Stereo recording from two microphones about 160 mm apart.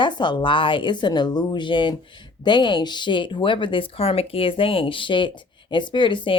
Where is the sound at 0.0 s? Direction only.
30° left (ahead or behind).